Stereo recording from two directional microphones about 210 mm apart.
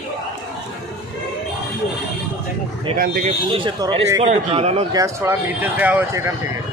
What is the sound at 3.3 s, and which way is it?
Speech, 25° right (ahead or behind).